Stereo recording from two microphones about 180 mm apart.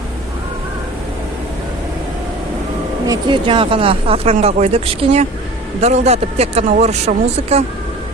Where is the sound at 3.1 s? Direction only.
25° right (ahead or behind).